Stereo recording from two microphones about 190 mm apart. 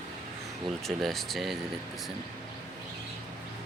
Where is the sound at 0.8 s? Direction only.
Centre (ahead or behind).